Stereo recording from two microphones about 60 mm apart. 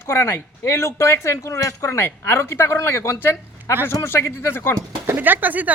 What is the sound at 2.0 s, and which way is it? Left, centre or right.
Speech, left.